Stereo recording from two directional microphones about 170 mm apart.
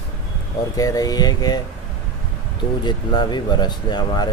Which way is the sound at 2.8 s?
25° left (ahead or behind).